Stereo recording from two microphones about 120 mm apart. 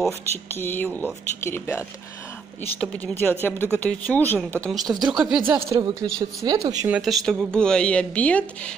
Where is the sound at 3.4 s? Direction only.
15° left (ahead or behind); by 5.4 s 5° right (ahead or behind).